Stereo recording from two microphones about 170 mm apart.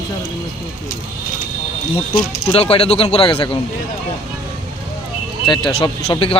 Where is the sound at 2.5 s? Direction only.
35° left (ahead or behind).